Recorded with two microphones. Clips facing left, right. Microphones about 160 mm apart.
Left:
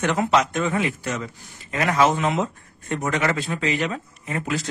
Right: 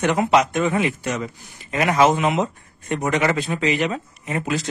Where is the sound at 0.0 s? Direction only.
15° right (ahead or behind).